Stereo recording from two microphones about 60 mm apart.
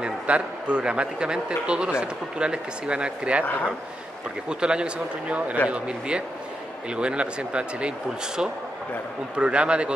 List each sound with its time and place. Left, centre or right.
0.0 s a man's voice: centre
4.5 s a man's voice: centre
9.4 s a man's voice: centre